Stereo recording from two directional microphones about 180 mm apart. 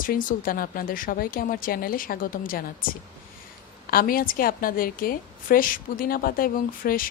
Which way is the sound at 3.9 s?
55° left (ahead or behind).